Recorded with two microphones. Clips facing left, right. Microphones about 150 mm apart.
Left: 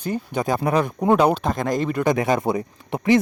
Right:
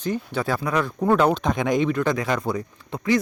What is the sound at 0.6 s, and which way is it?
Speech, 30° left (ahead or behind).